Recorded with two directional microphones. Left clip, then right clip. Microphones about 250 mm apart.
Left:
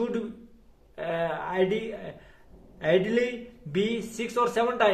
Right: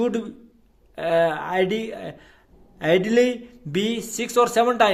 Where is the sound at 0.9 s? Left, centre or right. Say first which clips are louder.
Right 9 dB; right.